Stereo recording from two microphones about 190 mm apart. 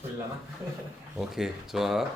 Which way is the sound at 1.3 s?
Centre (ahead or behind).